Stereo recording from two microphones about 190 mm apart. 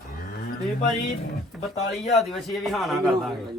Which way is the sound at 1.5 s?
Centre (ahead or behind).